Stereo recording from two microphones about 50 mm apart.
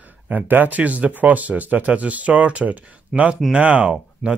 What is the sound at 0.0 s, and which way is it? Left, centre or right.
Speech, right.